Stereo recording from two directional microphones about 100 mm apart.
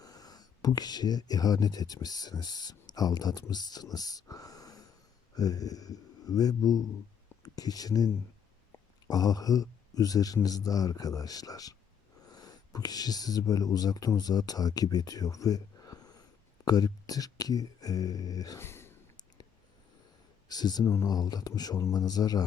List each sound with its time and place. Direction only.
0.0 s speech: 40° left (ahead or behind)
3.9 s wheeze: 40° left (ahead or behind)
5.3 s speech: 40° left (ahead or behind)
18.6 s a sound: 25° left (ahead or behind)
20.5 s speech: 45° left (ahead or behind)
20.8 s speech: 25° left (ahead or behind)
21.1 s speech: 40° left (ahead or behind)